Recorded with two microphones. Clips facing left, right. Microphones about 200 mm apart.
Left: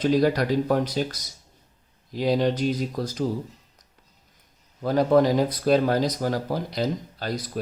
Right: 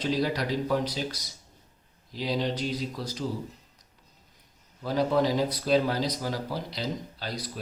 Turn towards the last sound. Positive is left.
turn(degrees=50)  # may be behind; listen again after turning